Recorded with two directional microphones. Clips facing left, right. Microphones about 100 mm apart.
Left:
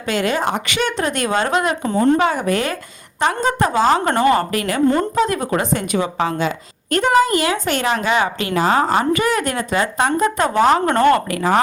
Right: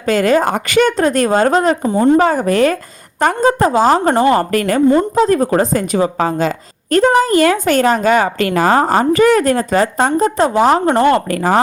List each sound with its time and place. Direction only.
0.0 s a woman's voice: 40° right (ahead or behind)
4.5 s a woman's voice: 45° right (ahead or behind)